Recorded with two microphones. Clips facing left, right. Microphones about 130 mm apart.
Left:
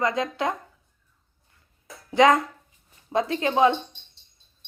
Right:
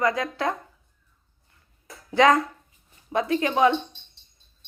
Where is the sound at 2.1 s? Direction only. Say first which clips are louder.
Left 1 dB; 25° left (ahead or behind).